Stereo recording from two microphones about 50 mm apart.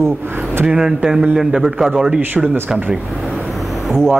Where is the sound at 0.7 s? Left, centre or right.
Centre.